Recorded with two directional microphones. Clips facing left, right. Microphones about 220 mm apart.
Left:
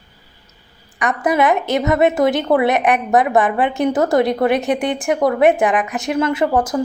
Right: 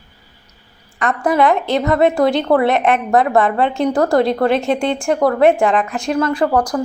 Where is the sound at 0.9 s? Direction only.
20° left (ahead or behind).